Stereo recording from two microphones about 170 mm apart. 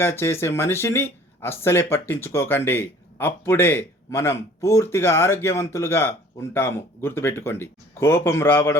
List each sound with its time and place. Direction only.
0.0 s speech: 15° left (ahead or behind)